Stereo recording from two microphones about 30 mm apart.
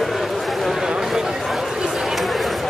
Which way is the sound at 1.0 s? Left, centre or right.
Centre.